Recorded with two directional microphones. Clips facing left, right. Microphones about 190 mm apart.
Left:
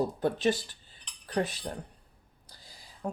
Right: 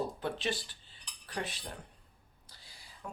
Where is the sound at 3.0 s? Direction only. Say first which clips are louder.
Left 10 dB; 35° left (ahead or behind).